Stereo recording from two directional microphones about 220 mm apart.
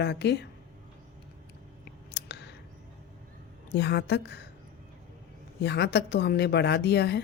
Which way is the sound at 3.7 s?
50° left (ahead or behind).